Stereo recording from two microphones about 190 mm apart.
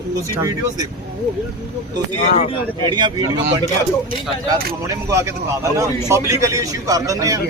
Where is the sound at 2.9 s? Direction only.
25° right (ahead or behind).